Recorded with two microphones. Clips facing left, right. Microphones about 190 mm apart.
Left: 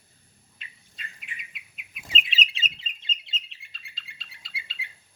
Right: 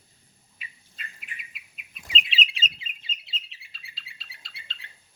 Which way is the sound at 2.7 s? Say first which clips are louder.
Left 2 dB; 5° right (ahead or behind).